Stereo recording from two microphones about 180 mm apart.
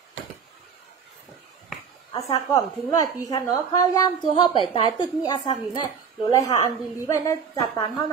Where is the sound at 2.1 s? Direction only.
20° left (ahead or behind).